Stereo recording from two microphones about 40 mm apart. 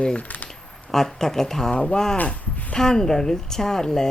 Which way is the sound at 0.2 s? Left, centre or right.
Left.